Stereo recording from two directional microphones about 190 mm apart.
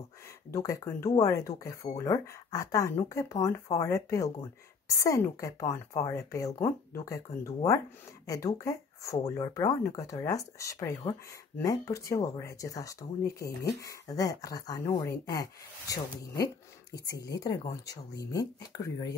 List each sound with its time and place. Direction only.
0.5 s speech: 15° left (ahead or behind)